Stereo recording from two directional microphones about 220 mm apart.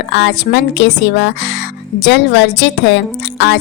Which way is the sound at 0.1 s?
55° left (ahead or behind).